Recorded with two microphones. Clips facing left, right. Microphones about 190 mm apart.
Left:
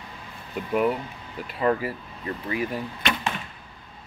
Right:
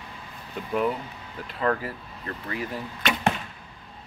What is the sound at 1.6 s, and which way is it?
Speech, 15° left (ahead or behind).